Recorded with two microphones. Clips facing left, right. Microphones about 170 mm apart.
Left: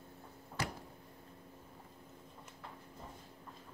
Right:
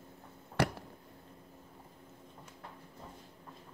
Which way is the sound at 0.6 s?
65° right (ahead or behind).